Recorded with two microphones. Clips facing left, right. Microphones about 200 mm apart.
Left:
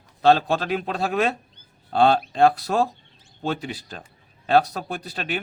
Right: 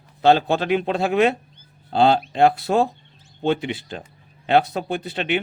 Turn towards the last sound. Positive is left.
turn(degrees=-25)  # may be behind; listen again after turning